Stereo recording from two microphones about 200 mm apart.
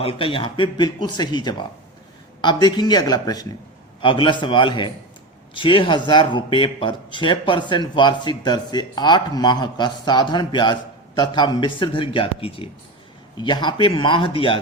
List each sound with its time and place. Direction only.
0.0 s speech: 25° left (ahead or behind)